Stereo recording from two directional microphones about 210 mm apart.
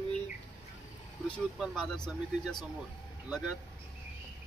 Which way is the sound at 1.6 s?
5° left (ahead or behind).